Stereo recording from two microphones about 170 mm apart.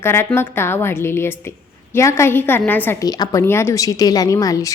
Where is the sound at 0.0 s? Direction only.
15° left (ahead or behind).